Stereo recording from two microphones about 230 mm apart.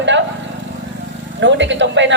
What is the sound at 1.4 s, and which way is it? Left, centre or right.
Speech, right.